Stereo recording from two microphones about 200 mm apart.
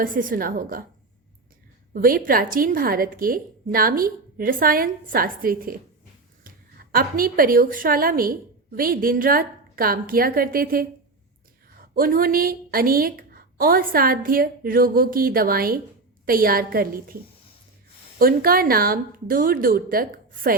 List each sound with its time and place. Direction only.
0.0 s speech: 45° right (ahead or behind)
1.9 s a woman's voice: 45° right (ahead or behind)
18.2 s speech: 45° right (ahead or behind)